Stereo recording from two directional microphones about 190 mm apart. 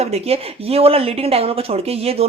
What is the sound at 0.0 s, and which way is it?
Speech, 30° right (ahead or behind).